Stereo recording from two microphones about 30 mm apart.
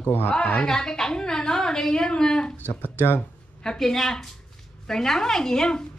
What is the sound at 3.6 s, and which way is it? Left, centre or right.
A woman's voice, centre.